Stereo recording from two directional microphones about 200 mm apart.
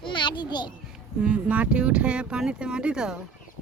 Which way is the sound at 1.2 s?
5° right (ahead or behind).